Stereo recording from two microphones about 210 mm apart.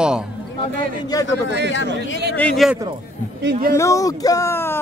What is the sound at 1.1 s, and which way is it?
Speech, 20° left (ahead or behind).